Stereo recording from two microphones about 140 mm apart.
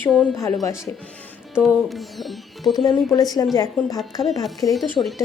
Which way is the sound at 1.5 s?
Centre (ahead or behind).